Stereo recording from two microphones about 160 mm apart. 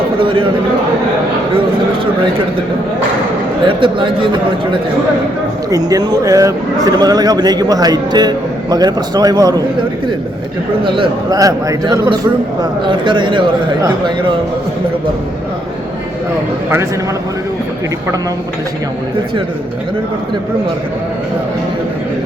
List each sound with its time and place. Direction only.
0.2 s speech: 35° right (ahead or behind)
3.7 s speech: 30° right (ahead or behind)
10.8 s speech: 30° right (ahead or behind)